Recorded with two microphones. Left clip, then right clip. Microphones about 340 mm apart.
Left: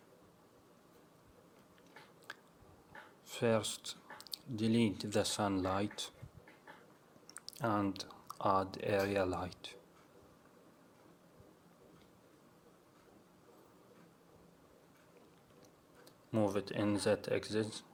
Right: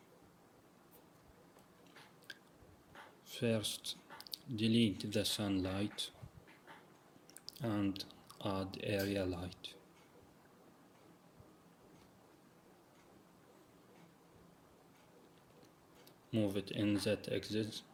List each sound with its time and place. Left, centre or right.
2.3 s biting: centre
3.2 s speech: centre
7.4 s a sound: centre
8.7 s speech: centre
16.5 s speech: centre